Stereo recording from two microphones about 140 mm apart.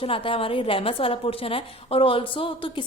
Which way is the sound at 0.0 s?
40° left (ahead or behind).